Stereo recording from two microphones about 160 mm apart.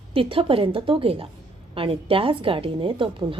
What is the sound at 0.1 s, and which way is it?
A woman's voice, 35° right (ahead or behind).